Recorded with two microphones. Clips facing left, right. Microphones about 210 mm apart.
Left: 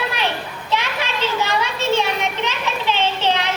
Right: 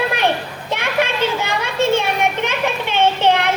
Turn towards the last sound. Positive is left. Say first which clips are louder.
# right 5 dB
turn(degrees=-55)  # may be behind; listen again after turning